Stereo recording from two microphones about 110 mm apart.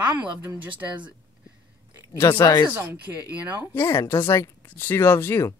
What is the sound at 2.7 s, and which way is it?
Speech, 20° right (ahead or behind).